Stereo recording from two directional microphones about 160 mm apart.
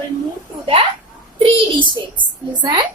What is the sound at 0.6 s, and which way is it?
A child's voice, 35° right (ahead or behind).